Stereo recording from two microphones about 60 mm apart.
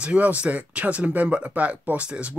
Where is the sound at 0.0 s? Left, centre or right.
Right.